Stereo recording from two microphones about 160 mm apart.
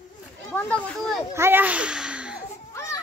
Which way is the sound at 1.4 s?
15° right (ahead or behind).